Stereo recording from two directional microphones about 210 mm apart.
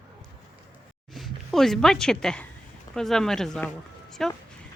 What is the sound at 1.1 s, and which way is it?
Speech, centre (ahead or behind).